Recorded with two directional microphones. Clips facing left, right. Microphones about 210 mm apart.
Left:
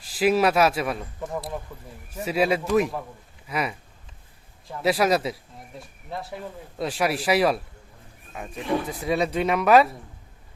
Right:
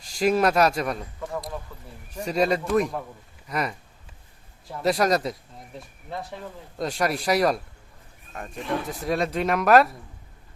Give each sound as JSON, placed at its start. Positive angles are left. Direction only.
{"t": 0.0, "sound": "speech", "side_deg": 5}
{"t": 1.7, "sound": "speech", "side_deg": 15}
{"t": 2.1, "sound": "speech", "side_deg": 5}
{"t": 4.8, "sound": "speech", "side_deg": 0}
{"t": 6.7, "sound": "speech", "side_deg": 5}